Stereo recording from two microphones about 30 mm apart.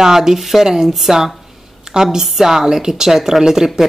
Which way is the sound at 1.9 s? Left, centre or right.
Right.